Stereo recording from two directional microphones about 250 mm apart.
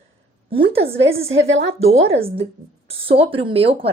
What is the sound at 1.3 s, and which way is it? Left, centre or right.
Speech, right.